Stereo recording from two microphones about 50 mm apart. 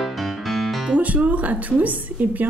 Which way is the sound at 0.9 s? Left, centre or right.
Right.